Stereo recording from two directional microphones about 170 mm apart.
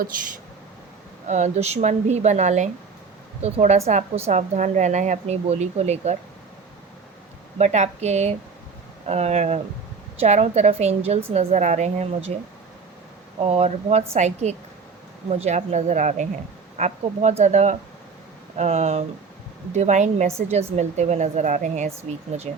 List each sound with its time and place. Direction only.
1.3 s a woman's voice: 40° right (ahead or behind)
7.6 s a woman's voice: 40° right (ahead or behind)
13.4 s a woman's voice: 35° right (ahead or behind)